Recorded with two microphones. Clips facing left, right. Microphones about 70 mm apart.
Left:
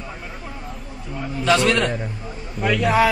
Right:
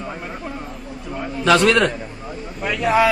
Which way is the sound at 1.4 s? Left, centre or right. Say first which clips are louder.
Right 3 dB; right.